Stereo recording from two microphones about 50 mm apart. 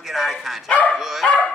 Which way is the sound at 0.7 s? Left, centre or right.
Left.